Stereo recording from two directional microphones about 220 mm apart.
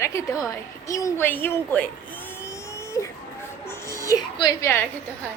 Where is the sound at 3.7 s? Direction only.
15° left (ahead or behind).